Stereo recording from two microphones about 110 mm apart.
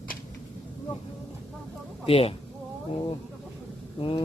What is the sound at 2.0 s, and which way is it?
Speech, 60° left (ahead or behind).